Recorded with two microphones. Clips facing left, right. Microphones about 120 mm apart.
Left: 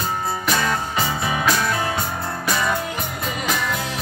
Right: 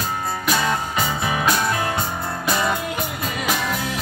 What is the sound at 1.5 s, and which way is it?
Music, 20° right (ahead or behind).